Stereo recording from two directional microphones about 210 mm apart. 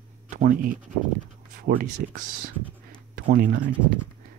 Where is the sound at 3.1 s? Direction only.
40° right (ahead or behind).